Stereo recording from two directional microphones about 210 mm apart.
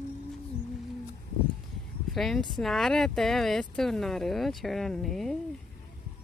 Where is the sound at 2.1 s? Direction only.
Centre (ahead or behind).